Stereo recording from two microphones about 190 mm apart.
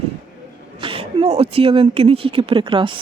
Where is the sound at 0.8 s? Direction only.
30° right (ahead or behind).